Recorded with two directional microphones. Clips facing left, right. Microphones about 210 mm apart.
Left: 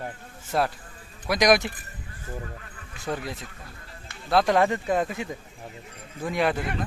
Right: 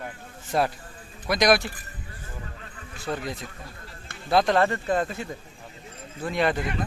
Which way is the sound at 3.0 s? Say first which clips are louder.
Even; 10° left (ahead or behind).